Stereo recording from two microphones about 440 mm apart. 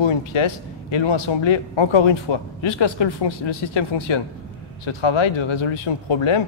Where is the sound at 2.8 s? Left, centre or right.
Left.